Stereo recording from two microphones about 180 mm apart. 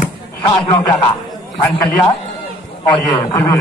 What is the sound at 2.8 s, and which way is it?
Speech, 20° left (ahead or behind).